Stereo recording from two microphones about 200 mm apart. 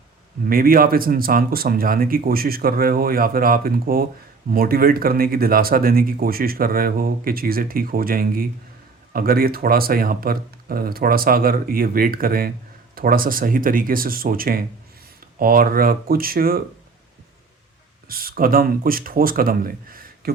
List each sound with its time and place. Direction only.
0.4 s speech: 45° right (ahead or behind)
18.1 s speech: 45° right (ahead or behind)